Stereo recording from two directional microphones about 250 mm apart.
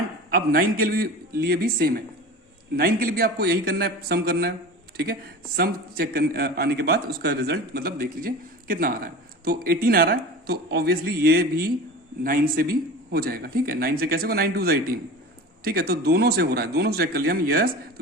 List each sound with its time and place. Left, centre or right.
0.3 s a man's voice: right
5.5 s a man's voice: right